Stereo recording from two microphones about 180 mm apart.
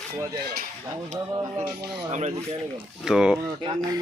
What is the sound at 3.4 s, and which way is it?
Speech, 25° right (ahead or behind).